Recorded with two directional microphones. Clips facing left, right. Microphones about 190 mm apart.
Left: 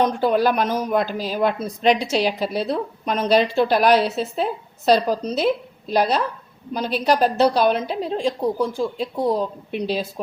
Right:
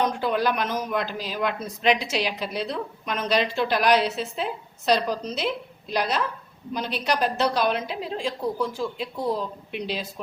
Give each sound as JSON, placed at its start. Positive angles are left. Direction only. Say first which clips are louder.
{"t": 0.2, "sound": "speech", "louder": "left 6 dB", "side_deg": 35}